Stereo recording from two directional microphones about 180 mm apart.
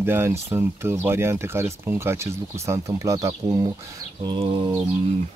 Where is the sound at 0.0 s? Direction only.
10° right (ahead or behind).